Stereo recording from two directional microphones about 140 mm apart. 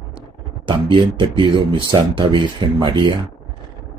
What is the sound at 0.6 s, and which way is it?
Speech, 35° right (ahead or behind).